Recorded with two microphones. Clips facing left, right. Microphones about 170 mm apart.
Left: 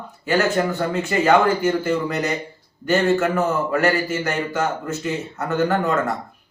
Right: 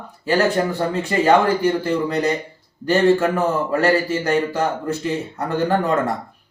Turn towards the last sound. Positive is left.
turn(degrees=-35)  # may be behind; listen again after turning